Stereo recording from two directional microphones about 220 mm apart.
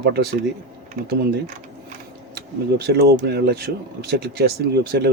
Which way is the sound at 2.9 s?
45° right (ahead or behind).